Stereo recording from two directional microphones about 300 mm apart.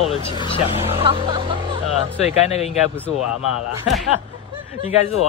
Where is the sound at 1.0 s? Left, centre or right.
Centre.